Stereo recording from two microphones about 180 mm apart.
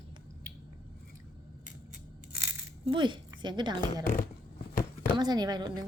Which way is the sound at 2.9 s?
25° right (ahead or behind).